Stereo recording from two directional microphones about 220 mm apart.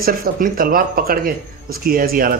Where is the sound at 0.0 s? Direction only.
40° right (ahead or behind).